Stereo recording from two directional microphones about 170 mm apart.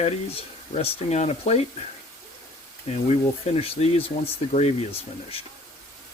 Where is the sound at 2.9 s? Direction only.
40° left (ahead or behind).